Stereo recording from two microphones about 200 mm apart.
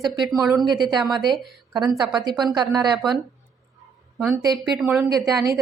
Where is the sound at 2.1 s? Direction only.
20° right (ahead or behind).